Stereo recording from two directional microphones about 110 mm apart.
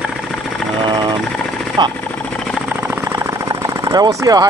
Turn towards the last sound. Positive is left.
turn(degrees=-35)  # may be behind; listen again after turning